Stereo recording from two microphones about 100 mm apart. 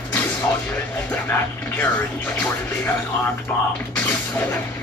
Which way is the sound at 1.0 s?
20° left (ahead or behind).